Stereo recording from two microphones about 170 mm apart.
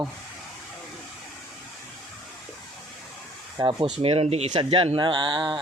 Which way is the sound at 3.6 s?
25° right (ahead or behind).